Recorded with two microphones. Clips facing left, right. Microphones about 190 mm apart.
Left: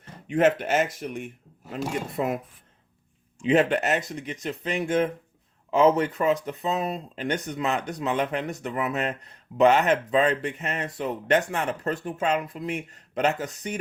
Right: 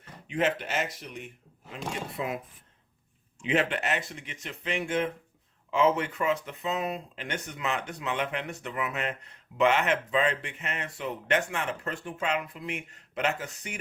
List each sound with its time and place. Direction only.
0.3 s speech: 50° left (ahead or behind)